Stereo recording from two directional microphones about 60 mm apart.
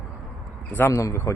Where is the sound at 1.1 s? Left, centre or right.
Left.